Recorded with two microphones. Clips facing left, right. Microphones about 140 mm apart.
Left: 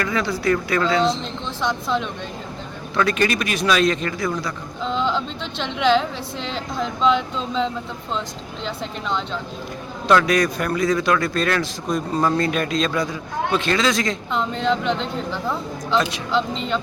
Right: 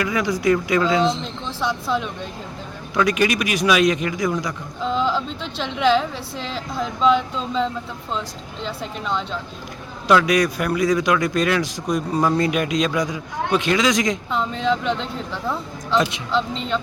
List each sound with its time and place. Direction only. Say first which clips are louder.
0.0 s a man's voice: right 2 dB; 15° right (ahead or behind)
1.2 s a woman's voice: even; 5° right (ahead or behind)
4.8 s a woman's voice: right 1 dB; 5° right (ahead or behind)
14.3 s a woman's voice: even; centre (ahead or behind)